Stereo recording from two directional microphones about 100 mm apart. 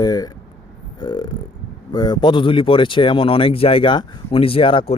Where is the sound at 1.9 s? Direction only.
45° left (ahead or behind).